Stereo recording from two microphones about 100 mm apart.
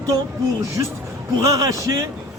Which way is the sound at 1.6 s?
35° right (ahead or behind).